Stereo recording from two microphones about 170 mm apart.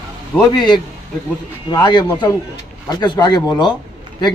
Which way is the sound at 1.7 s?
25° left (ahead or behind).